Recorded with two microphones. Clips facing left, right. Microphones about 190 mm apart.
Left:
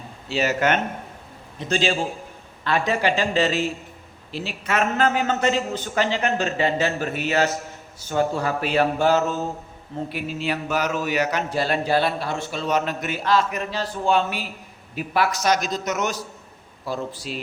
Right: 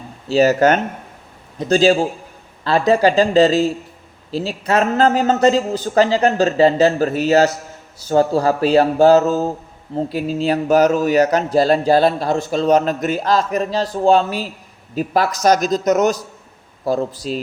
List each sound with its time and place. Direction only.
0.3 s a man's voice: 40° right (ahead or behind)